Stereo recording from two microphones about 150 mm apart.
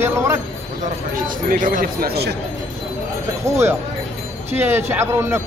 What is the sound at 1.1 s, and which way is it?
Speech, 65° right (ahead or behind).